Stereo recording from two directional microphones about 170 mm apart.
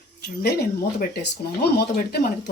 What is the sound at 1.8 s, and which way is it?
Speech, 70° left (ahead or behind).